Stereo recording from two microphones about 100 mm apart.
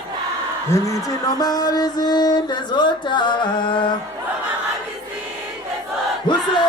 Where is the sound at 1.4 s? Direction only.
40° left (ahead or behind).